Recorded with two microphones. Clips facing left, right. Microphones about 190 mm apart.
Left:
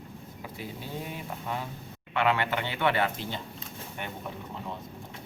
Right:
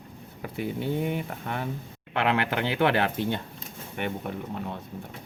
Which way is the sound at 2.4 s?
85° right.